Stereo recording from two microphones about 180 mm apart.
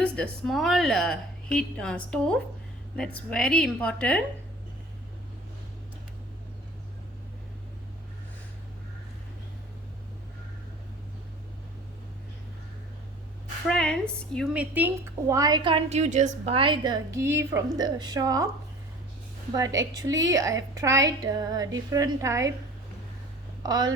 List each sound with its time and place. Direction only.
0.0 s a woman's voice: 5° left (ahead or behind)
13.7 s a woman's voice: 5° left (ahead or behind); by 18.4 s 20° right (ahead or behind)
19.5 s a woman's voice: 20° right (ahead or behind)
23.6 s a woman's voice: 20° right (ahead or behind)